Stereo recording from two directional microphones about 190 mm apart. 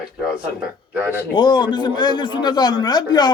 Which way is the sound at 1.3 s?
20° left (ahead or behind).